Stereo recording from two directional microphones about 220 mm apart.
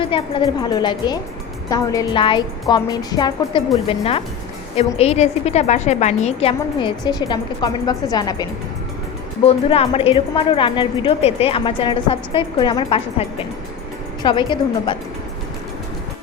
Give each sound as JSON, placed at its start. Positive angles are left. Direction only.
{"t": 0.0, "sound": "a woman's voice", "side_deg": 20}